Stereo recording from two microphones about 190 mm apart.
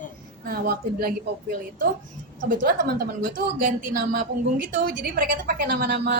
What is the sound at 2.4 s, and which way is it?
A woman's voice, 45° right (ahead or behind).